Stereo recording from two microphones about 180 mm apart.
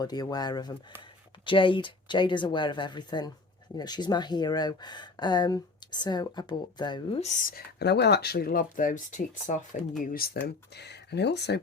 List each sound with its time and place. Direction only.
0.0 s speech: 20° left (ahead or behind)
7.2 s speech: 45° left (ahead or behind)
10.1 s speech: 55° left (ahead or behind)